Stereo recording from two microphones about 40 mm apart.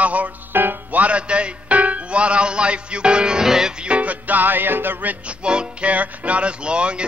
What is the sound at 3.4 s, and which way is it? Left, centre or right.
Music, centre.